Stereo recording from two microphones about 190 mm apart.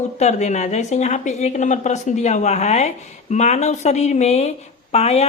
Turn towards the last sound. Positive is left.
turn(degrees=35)  # may be behind; listen again after turning